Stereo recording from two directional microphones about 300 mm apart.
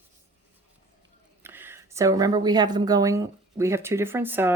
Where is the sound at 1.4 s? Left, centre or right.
Centre.